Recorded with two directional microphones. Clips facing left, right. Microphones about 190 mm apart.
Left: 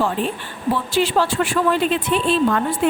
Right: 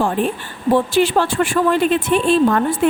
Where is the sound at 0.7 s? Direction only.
50° right (ahead or behind).